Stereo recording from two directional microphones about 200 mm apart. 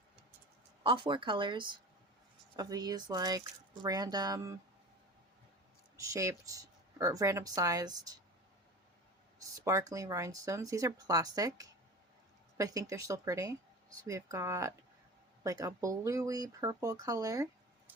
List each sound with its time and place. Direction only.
0.9 s speech: 25° right (ahead or behind)
6.1 s speech: 15° right (ahead or behind)
9.6 s speech: 15° right (ahead or behind)